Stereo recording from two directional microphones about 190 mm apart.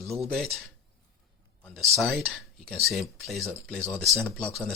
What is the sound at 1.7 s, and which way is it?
Speech, centre (ahead or behind).